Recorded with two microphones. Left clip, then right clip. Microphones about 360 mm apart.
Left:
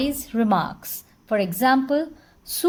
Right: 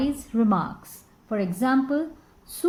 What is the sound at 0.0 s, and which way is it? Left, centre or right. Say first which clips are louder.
A woman's voice: left 1 dB; left.